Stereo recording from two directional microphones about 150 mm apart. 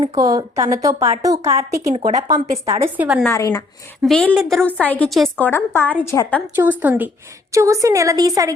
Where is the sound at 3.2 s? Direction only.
20° left (ahead or behind).